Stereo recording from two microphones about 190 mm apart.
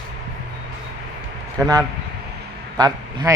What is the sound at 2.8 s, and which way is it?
Speech, 20° right (ahead or behind).